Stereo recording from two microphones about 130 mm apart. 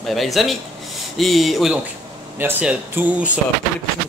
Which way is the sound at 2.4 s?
15° right (ahead or behind).